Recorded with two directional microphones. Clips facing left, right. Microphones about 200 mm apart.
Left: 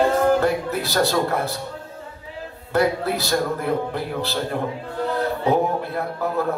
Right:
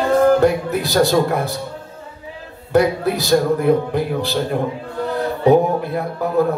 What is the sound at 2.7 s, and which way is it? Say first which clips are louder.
Speech: right 4 dB; 15° right (ahead or behind).